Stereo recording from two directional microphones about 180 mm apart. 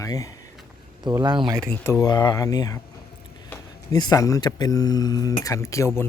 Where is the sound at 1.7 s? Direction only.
10° left (ahead or behind).